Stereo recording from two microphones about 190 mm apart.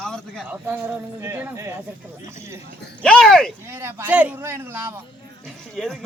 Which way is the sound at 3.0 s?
5° left (ahead or behind).